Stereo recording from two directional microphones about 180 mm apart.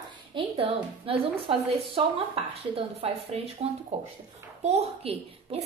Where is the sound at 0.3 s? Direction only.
30° right (ahead or behind).